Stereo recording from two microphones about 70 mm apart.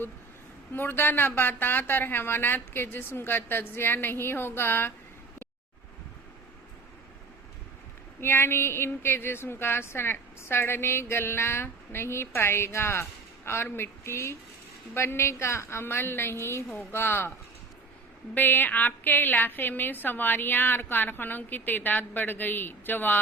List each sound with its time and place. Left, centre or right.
0.7 s a woman's voice: left
8.2 s a woman's voice: left
18.3 s a woman's voice: left